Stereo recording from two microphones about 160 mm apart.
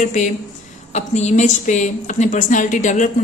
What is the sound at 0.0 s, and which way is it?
A woman's voice, 50° left (ahead or behind).